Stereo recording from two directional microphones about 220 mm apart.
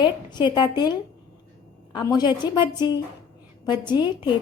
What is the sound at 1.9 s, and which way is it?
Speech, 20° left (ahead or behind).